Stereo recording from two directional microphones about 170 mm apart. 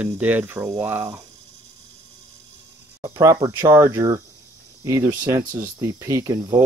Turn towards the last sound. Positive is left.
turn(degrees=-20)  # may be behind; listen again after turning